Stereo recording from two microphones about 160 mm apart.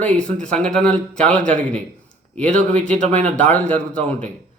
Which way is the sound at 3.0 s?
50° right (ahead or behind).